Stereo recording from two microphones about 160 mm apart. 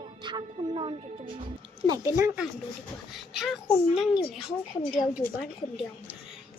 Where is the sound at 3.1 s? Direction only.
Centre (ahead or behind).